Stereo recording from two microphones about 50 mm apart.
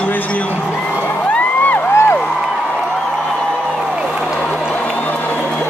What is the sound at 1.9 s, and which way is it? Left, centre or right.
Music, left.